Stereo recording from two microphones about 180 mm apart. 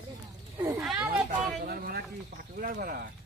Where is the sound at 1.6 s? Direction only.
60° right (ahead or behind).